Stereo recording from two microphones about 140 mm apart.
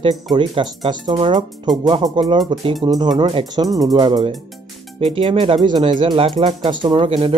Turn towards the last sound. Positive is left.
turn(degrees=-40)  # may be behind; listen again after turning